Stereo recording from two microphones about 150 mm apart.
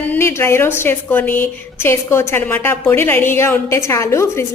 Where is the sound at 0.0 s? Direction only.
15° left (ahead or behind).